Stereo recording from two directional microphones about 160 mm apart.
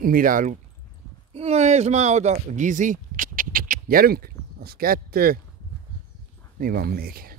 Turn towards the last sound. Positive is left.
turn(degrees=-65)  # may be behind; listen again after turning